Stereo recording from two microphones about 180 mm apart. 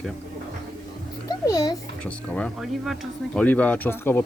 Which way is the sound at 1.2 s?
20° left (ahead or behind).